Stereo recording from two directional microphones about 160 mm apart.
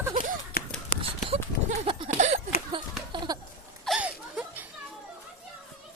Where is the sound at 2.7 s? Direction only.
30° right (ahead or behind).